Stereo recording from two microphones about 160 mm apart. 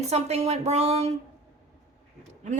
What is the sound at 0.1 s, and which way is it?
Speech, 40° right (ahead or behind).